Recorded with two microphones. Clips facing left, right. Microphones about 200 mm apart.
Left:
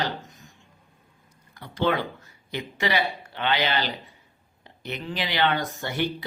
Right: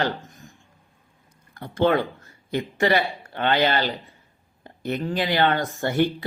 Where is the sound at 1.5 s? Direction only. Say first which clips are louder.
Right 5 dB; 50° right (ahead or behind).